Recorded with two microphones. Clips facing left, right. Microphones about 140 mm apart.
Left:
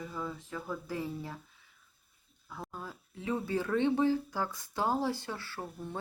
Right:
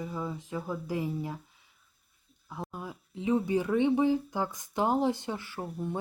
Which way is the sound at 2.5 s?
15° right (ahead or behind).